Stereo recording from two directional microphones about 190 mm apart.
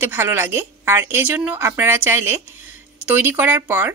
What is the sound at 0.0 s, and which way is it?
A woman's voice, 10° right (ahead or behind).